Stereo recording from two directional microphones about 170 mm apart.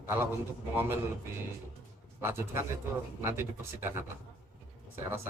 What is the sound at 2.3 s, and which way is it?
A man's voice, 15° right (ahead or behind).